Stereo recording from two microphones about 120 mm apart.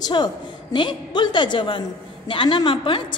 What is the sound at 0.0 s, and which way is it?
A woman's voice, 40° left (ahead or behind).